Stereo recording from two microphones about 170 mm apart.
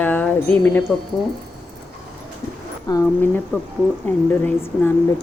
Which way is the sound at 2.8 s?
20° left (ahead or behind).